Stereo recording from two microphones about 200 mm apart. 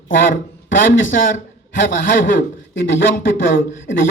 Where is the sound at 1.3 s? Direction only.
65° left (ahead or behind).